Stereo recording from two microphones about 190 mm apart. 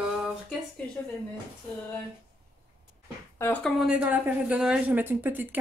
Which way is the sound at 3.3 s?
10° left (ahead or behind).